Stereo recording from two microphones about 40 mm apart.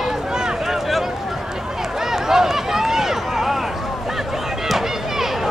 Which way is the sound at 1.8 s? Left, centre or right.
Centre.